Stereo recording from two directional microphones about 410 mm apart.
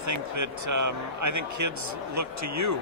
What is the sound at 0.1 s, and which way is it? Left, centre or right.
Speech, right.